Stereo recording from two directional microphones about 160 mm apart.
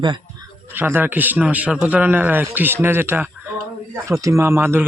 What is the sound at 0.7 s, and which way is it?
Speech, 10° right (ahead or behind).